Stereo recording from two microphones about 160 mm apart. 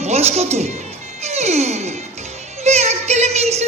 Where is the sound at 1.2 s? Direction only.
45° right (ahead or behind).